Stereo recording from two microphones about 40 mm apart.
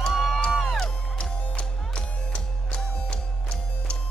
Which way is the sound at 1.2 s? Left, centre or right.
Left.